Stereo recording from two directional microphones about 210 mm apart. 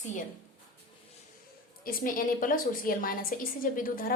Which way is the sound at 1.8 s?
45° left (ahead or behind).